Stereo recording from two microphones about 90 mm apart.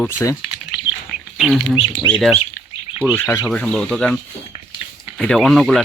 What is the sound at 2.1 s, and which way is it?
Speech, 5° left (ahead or behind).